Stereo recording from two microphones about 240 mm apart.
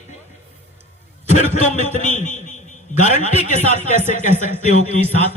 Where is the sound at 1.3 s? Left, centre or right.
Left.